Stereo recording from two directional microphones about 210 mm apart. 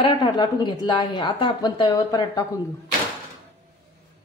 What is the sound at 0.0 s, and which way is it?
A woman's voice, 20° left (ahead or behind).